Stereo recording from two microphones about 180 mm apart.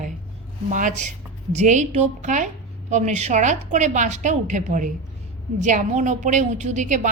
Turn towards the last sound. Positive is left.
turn(degrees=-45)  # may be behind; listen again after turning